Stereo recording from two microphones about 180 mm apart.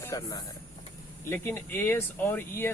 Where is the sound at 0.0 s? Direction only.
15° left (ahead or behind).